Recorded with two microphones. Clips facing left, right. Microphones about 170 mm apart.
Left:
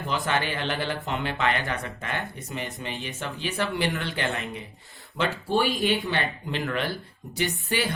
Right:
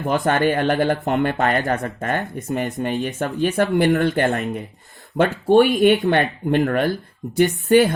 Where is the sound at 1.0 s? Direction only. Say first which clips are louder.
Right 8 dB; 60° right (ahead or behind).